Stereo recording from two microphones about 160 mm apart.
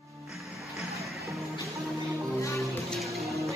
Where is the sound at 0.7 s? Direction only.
Centre (ahead or behind).